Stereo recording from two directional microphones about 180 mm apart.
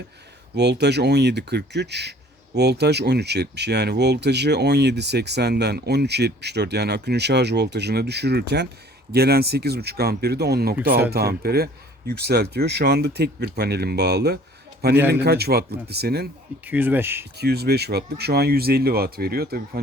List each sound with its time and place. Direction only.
0.5 s speech: 70° right (ahead or behind)
16.6 s speech: 10° right (ahead or behind)
17.3 s speech: 65° right (ahead or behind)